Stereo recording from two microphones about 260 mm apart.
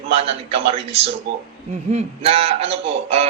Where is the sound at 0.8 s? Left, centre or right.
Right.